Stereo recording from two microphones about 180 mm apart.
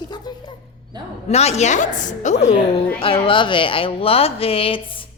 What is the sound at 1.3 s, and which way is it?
A woman's voice, 35° left (ahead or behind).